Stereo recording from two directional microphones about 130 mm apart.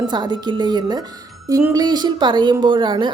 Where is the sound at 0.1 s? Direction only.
35° right (ahead or behind).